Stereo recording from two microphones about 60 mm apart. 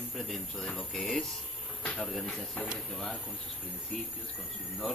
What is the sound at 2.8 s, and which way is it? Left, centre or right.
Speech, centre.